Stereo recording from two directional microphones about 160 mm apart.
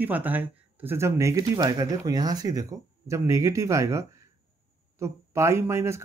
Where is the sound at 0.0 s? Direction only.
10° right (ahead or behind).